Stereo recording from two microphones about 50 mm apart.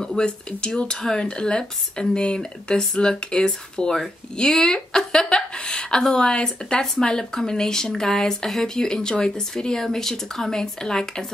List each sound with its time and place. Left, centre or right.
0.0 s a woman's voice: centre